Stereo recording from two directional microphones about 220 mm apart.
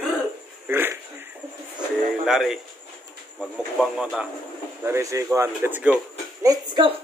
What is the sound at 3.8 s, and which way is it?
Speech, centre (ahead or behind).